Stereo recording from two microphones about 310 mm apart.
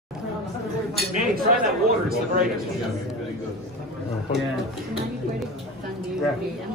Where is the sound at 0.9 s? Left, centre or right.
Right.